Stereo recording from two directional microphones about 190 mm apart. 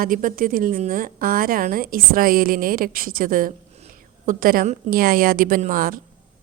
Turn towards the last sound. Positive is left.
turn(degrees=-45)  # may be behind; listen again after turning